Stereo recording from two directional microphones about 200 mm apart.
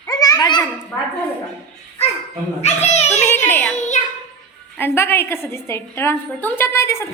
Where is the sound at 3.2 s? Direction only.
10° left (ahead or behind).